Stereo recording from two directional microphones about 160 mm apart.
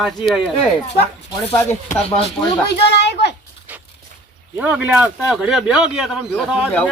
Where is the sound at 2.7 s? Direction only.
90° left.